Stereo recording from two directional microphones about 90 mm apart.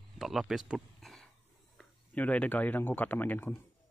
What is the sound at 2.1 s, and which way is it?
Speech, 15° left (ahead or behind).